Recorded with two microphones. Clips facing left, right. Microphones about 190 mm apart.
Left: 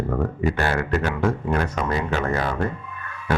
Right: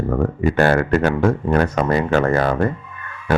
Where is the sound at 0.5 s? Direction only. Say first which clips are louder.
Right 7 dB; 50° right (ahead or behind).